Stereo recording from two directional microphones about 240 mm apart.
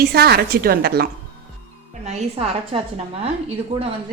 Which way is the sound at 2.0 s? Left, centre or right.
Right.